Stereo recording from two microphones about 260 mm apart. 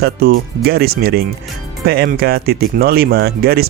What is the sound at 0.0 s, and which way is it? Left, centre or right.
Speech, right.